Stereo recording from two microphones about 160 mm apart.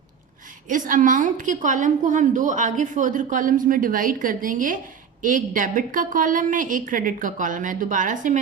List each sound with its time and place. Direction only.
0.7 s a woman's voice: 55° right (ahead or behind)